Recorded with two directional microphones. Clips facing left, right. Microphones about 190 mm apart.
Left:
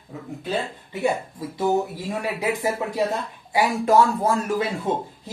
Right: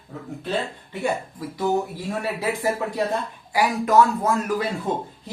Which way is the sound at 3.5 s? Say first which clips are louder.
Even; 30° left (ahead or behind).